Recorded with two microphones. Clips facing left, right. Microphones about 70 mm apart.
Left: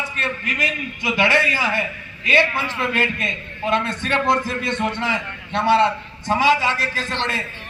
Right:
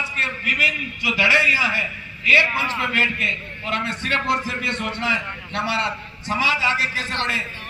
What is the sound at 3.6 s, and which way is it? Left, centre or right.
Speech, left.